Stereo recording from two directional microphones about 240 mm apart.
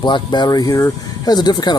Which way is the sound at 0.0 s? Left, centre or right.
Centre.